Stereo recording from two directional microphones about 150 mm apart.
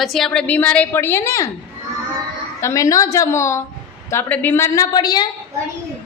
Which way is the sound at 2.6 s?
20° left (ahead or behind).